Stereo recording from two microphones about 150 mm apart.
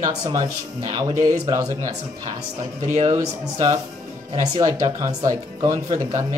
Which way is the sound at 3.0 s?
20° right (ahead or behind).